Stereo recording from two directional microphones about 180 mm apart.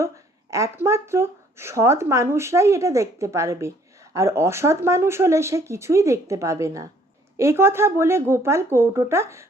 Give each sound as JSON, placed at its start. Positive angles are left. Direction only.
{"t": 0.5, "sound": "speech", "side_deg": -15}